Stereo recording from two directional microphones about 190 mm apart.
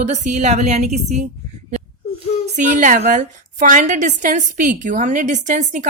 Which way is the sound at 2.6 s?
40° right (ahead or behind).